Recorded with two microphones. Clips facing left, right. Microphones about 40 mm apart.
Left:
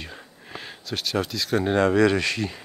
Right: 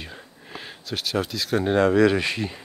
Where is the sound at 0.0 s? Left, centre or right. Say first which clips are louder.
Even; centre.